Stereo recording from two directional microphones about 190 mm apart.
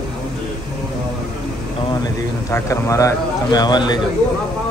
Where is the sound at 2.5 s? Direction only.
15° left (ahead or behind).